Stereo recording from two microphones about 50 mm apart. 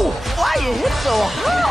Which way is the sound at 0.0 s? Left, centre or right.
Centre.